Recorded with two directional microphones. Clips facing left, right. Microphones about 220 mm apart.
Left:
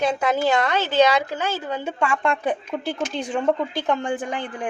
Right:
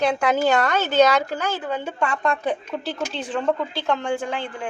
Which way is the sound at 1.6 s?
10° left (ahead or behind).